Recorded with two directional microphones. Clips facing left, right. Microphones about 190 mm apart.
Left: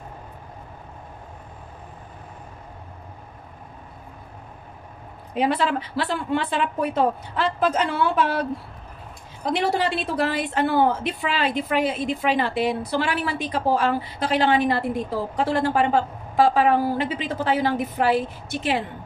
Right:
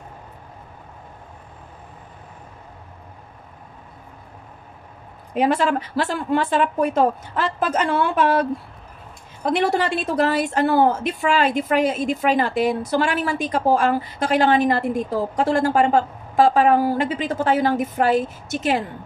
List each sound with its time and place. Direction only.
5.3 s a woman's voice: 45° right (ahead or behind)
9.5 s a woman's voice: 50° right (ahead or behind)